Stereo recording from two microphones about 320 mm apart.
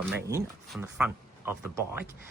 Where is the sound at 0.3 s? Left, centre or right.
Centre.